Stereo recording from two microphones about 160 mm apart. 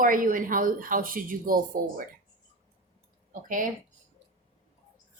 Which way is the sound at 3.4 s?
55° right (ahead or behind).